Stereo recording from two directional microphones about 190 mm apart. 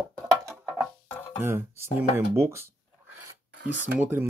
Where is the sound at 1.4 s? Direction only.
15° right (ahead or behind).